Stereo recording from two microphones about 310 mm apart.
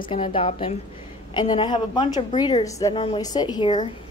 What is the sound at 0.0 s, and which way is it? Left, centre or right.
A woman's voice, centre.